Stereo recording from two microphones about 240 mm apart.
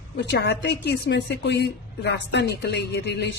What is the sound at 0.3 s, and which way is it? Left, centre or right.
Speech, left.